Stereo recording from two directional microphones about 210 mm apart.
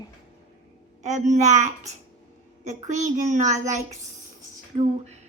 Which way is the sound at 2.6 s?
35° right (ahead or behind).